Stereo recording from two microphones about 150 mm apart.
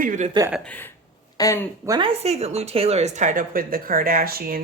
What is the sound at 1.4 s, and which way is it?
Speech, 20° left (ahead or behind).